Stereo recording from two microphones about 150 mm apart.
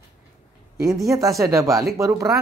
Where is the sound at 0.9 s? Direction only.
Centre (ahead or behind).